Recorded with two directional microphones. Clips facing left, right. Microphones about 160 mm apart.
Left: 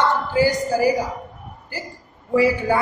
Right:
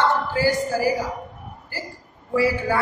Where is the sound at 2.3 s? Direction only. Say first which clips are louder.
Left 3 dB; 15° left (ahead or behind).